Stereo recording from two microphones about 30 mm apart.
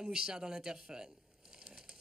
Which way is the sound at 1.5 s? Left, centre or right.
Right.